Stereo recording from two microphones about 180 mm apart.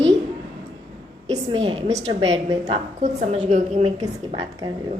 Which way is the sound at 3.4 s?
40° right (ahead or behind).